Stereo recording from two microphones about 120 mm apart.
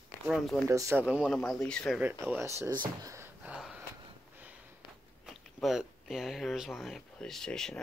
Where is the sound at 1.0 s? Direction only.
10° right (ahead or behind).